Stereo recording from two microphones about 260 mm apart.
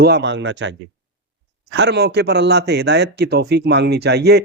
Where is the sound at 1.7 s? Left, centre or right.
Right.